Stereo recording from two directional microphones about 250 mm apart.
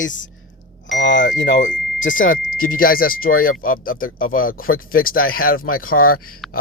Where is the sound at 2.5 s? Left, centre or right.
Left.